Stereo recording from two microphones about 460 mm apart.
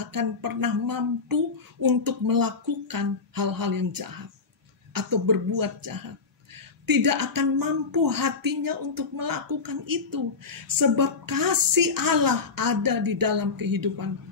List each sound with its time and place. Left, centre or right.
0.0 s speech: right